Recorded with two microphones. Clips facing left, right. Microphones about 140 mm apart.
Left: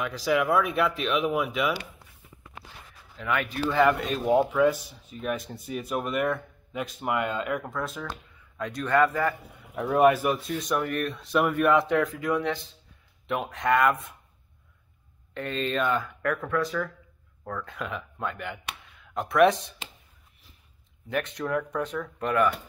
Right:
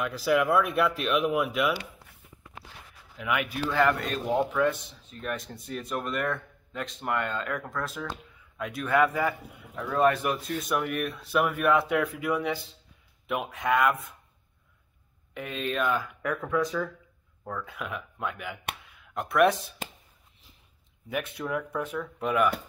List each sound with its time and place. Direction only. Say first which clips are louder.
0.0 s speech: even; centre (ahead or behind)
3.2 s speech: left 1 dB; 10° right (ahead or behind)
3.7 s speech: left 2 dB; centre (ahead or behind)
9.8 s a man's voice: left 4 dB; 20° left (ahead or behind)
10.0 s speech: left 3 dB; 5° left (ahead or behind)
15.3 s speech: left 2 dB; 5° right (ahead or behind)
17.5 s speech: left 1 dB; 5° right (ahead or behind)
18.9 s a sound: left 6 dB; centre (ahead or behind)
21.1 s speech: left 3 dB; 5° right (ahead or behind)